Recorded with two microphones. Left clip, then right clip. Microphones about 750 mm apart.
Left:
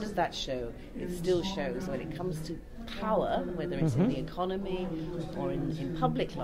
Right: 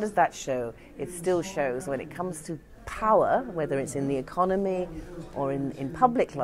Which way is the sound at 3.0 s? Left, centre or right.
Right.